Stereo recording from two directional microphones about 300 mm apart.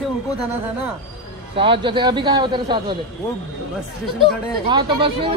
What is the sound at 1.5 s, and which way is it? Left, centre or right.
A man's voice, centre.